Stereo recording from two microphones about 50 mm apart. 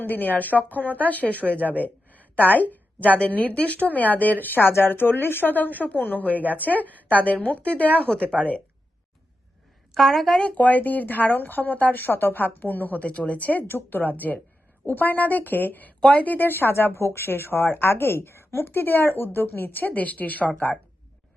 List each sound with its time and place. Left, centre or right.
0.0 s a woman's voice: left
9.9 s a woman's voice: centre
10.4 s speech: left
13.7 s speech: left
16.0 s speech: left
16.2 s speech: left